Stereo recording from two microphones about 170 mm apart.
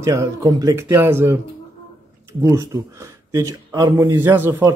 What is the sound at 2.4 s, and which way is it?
Speech, 15° right (ahead or behind).